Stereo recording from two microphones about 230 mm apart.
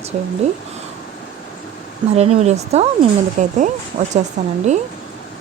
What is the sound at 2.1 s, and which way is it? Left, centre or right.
Speech, right.